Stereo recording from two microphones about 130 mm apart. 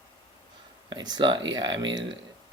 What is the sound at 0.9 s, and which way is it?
Speech, 35° right (ahead or behind).